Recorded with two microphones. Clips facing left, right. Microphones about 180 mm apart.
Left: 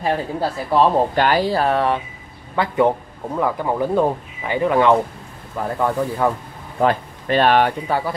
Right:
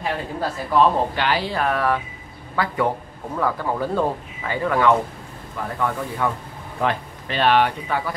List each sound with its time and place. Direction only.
0.0 s speech: 35° left (ahead or behind)
1.1 s speech: 45° left (ahead or behind); by 4.9 s 20° left (ahead or behind)
5.8 s speech: 35° left (ahead or behind)